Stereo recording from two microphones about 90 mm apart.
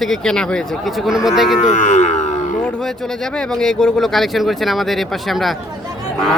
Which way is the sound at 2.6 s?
5° left (ahead or behind).